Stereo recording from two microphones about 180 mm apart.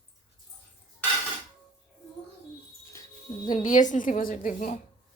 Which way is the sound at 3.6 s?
45° left (ahead or behind).